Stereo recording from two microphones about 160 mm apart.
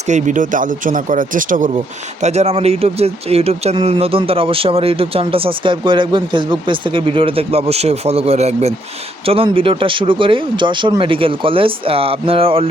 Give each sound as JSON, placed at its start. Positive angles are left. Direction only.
{"t": 0.1, "sound": "speech", "side_deg": -50}
{"t": 2.2, "sound": "speech", "side_deg": -40}